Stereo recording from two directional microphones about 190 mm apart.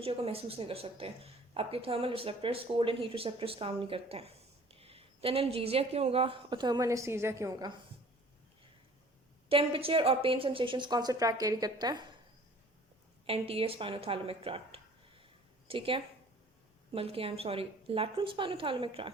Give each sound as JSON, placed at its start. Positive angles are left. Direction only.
{"t": 0.0, "sound": "speech", "side_deg": -30}
{"t": 9.5, "sound": "speech", "side_deg": -30}
{"t": 13.2, "sound": "a woman's voice", "side_deg": -30}